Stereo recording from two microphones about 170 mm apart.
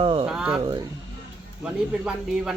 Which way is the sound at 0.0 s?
30° right (ahead or behind).